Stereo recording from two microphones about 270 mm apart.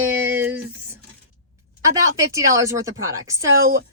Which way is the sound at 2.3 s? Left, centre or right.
Centre.